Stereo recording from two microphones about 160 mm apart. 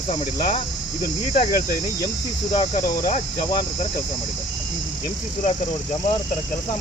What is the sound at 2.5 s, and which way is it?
Cricket, 50° left (ahead or behind).